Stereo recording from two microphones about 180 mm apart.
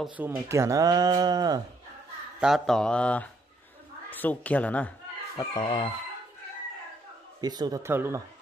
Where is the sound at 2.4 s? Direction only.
Centre (ahead or behind).